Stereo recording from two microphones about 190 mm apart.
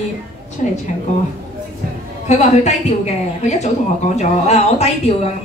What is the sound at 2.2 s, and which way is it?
A woman's voice, 35° left (ahead or behind).